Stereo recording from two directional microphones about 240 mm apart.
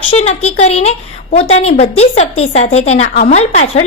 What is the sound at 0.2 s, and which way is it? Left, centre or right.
A woman's voice, left.